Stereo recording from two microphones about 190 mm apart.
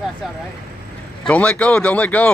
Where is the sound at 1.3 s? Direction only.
5° left (ahead or behind).